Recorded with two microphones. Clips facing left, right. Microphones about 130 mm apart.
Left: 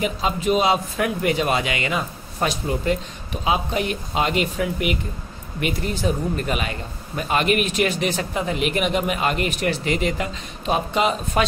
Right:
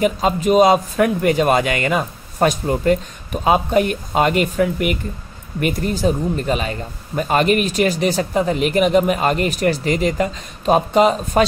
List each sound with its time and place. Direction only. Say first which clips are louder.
0.0 s a man's voice: right 5 dB; 45° right (ahead or behind)